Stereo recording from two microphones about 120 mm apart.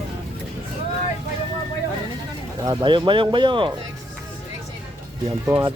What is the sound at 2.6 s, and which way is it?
Speech, 40° right (ahead or behind).